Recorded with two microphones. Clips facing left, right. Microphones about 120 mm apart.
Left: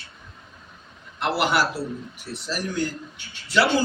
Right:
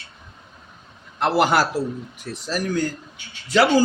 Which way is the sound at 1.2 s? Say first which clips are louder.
Right 4 dB; 40° right (ahead or behind).